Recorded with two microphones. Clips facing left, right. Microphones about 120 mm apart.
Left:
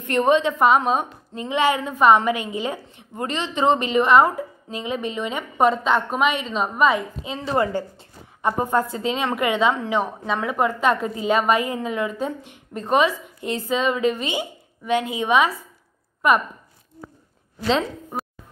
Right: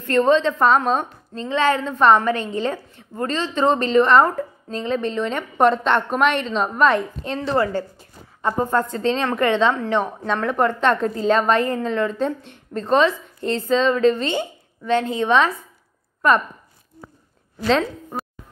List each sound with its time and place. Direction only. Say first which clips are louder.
0.0 s a woman's voice: right 2 dB; 15° left (ahead or behind)
7.5 s a woman's voice: even; 20° left (ahead or behind)
17.6 s speech: right 2 dB; centre (ahead or behind)